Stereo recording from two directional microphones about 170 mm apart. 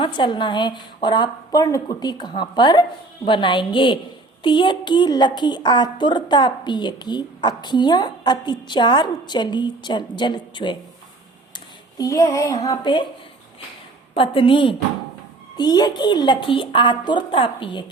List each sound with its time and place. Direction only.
0.0 s a woman's voice: 30° left (ahead or behind)
11.9 s a woman's voice: 20° left (ahead or behind)
14.1 s a woman's voice: 30° left (ahead or behind)